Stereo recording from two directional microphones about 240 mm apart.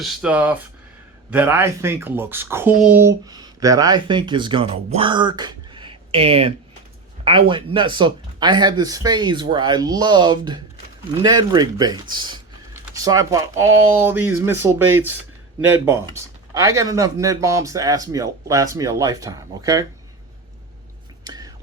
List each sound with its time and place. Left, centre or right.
0.0 s speech: centre
21.2 s whispering: centre